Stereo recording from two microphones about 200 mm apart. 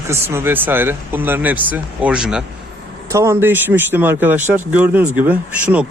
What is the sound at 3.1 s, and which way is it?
Speech, 15° right (ahead or behind).